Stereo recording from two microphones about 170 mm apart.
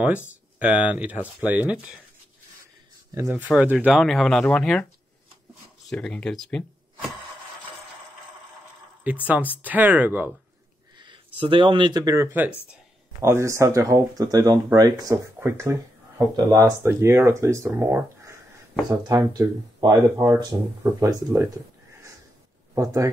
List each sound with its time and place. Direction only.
0.6 s speech: 10° right (ahead or behind)
3.2 s speech: 10° right (ahead or behind); by 4.8 s 5° left (ahead or behind)
5.9 s speech: 5° left (ahead or behind)
9.0 s speech: 10° right (ahead or behind)
11.0 s speech: 30° right (ahead or behind)
22.8 s speech: 20° right (ahead or behind)